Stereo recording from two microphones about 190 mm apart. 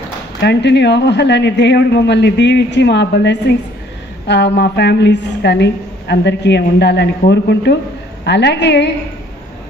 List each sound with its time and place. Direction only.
0.4 s a woman's voice: 65° left (ahead or behind)